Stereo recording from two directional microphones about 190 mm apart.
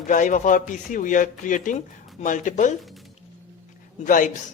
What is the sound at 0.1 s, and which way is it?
A woman's voice, 45° left (ahead or behind).